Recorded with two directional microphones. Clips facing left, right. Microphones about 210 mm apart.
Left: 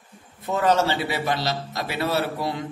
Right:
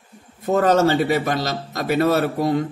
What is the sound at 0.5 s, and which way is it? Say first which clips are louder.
A man's voice: right 5 dB; 45° right (ahead or behind).